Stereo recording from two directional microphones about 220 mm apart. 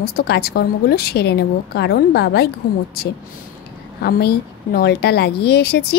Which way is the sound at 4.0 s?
45° left (ahead or behind).